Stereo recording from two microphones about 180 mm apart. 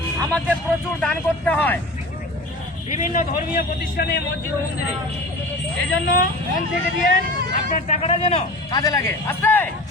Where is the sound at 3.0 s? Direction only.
50° left (ahead or behind).